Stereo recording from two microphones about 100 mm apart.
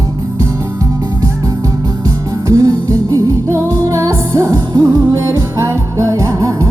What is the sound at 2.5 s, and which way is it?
Music, 35° right (ahead or behind).